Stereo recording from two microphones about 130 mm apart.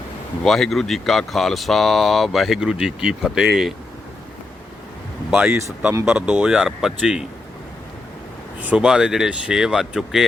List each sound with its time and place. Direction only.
0.4 s speech: centre (ahead or behind)
5.3 s speech: 10° right (ahead or behind)
5.5 s speech: 20° right (ahead or behind); by 7.3 s 5° right (ahead or behind)
8.6 s speech: 5° right (ahead or behind)